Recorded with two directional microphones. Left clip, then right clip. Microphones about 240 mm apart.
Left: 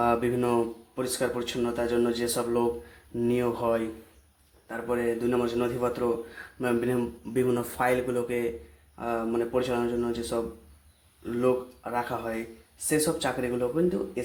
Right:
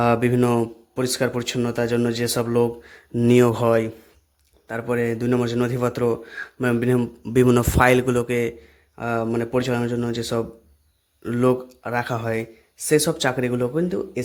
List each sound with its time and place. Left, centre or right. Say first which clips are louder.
0.0 s speech: right 6 dB; right